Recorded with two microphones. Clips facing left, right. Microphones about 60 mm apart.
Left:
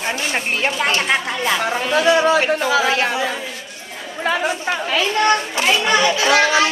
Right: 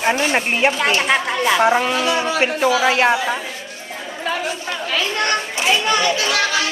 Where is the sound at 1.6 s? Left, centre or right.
Right.